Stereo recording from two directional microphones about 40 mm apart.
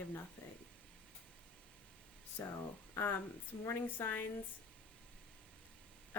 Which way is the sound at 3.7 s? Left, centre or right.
Left.